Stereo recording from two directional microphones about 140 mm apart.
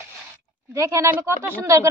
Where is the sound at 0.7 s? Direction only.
20° right (ahead or behind).